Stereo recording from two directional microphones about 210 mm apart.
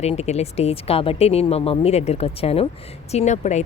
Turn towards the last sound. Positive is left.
turn(degrees=35)  # may be behind; listen again after turning